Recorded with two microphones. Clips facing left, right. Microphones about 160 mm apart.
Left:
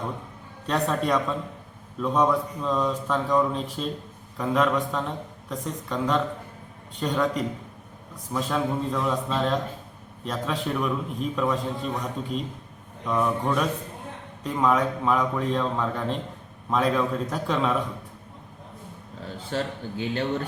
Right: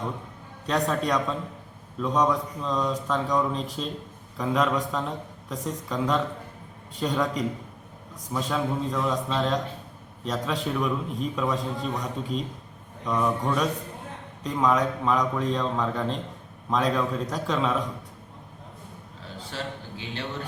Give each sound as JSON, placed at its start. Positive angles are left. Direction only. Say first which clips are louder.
{"t": 0.7, "sound": "a man's voice", "louder": "left 1 dB", "side_deg": 0}
{"t": 19.5, "sound": "a man's voice", "louder": "left 6 dB", "side_deg": 45}